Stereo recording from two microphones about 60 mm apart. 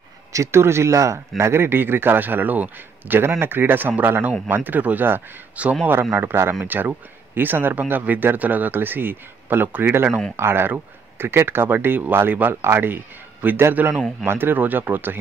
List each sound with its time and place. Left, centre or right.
0.3 s speech: right
1.4 s a man's voice: right
5.6 s speech: right
6.1 s a man's voice: right